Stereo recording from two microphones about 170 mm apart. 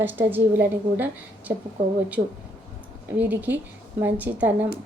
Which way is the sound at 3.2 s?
10° right (ahead or behind).